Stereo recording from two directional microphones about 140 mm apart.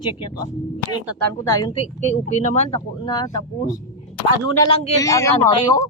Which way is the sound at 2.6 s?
35° left (ahead or behind).